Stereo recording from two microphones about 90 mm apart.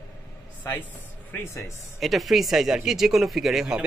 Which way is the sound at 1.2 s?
25° left (ahead or behind).